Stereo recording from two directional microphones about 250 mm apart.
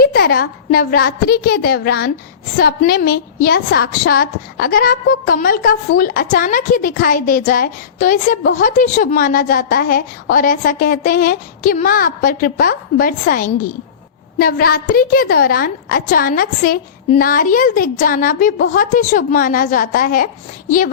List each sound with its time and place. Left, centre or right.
0.0 s a woman's voice: left